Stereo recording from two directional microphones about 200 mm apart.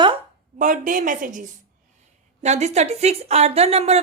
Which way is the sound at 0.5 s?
40° right (ahead or behind).